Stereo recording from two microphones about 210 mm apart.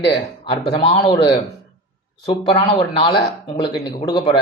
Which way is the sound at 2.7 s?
25° left (ahead or behind).